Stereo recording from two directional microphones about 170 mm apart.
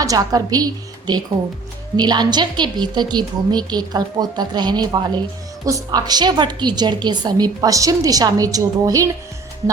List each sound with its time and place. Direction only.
0.0 s a woman's voice: 20° right (ahead or behind)